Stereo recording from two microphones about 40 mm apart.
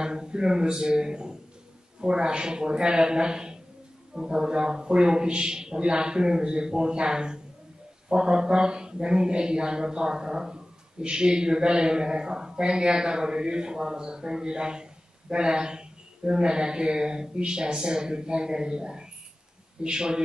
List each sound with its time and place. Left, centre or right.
0.0 s speech: centre